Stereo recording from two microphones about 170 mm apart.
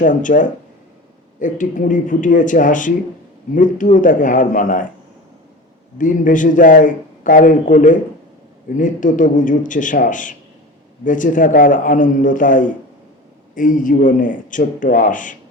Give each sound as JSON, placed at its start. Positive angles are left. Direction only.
{"t": 0.0, "sound": "a man's voice", "side_deg": 50}
{"t": 6.0, "sound": "a man's voice", "side_deg": 50}